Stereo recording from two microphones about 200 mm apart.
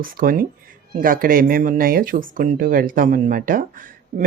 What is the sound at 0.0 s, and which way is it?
Speech, 45° right (ahead or behind).